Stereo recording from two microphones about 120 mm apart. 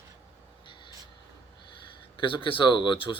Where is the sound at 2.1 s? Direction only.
45° left (ahead or behind).